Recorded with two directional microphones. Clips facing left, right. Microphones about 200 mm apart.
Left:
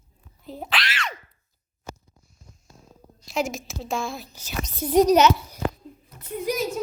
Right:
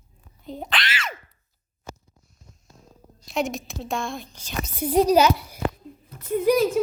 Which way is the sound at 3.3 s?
Centre (ahead or behind).